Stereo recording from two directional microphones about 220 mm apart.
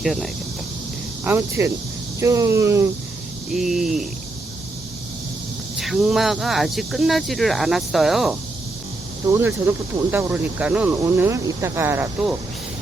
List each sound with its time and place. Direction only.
0.0 s speech: centre (ahead or behind)
1.2 s speech: 10° right (ahead or behind)
3.5 s speech: centre (ahead or behind)
5.7 s speech: centre (ahead or behind)